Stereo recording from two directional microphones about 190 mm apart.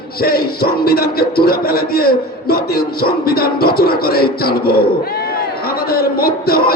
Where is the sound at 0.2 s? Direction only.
50° left (ahead or behind).